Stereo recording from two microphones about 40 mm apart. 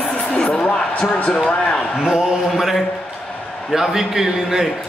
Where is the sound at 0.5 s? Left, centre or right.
Left.